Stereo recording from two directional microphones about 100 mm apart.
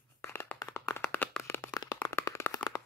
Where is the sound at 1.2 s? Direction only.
15° left (ahead or behind).